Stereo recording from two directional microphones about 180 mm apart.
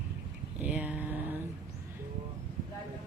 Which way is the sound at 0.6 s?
5° right (ahead or behind).